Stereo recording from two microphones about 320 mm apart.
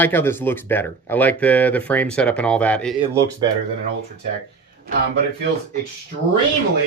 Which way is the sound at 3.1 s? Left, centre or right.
Centre.